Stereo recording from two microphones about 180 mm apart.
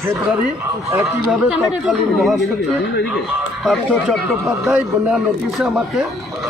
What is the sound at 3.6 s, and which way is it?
A man's voice, centre (ahead or behind).